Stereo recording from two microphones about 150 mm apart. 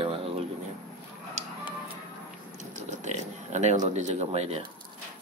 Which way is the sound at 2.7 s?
50° right (ahead or behind).